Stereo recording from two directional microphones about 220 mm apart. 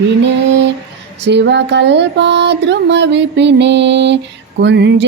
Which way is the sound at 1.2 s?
50° right (ahead or behind).